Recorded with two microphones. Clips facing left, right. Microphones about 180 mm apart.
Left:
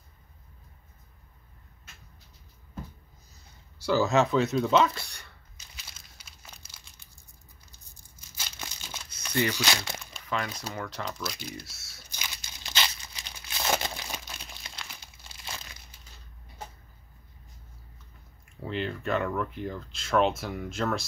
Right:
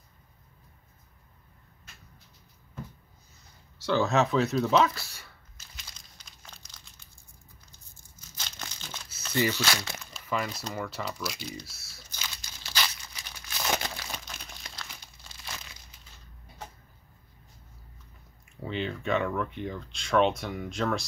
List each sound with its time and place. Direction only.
3.7 s a sound: 5° left (ahead or behind)
8.4 s crumpling: 10° left (ahead or behind)
9.5 s speech: 15° left (ahead or behind)
10.1 s speech: 5° right (ahead or behind)
12.1 s tearing: 15° left (ahead or behind)
14.1 s crumpling: 5° left (ahead or behind)
18.6 s speech: centre (ahead or behind)